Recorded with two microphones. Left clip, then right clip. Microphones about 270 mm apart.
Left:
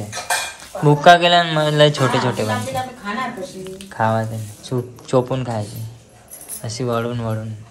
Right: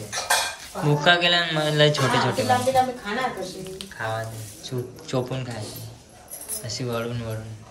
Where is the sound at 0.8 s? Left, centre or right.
Centre.